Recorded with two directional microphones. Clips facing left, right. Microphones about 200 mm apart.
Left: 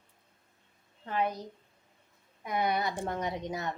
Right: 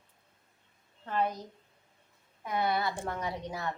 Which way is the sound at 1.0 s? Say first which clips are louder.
Even; 10° left (ahead or behind).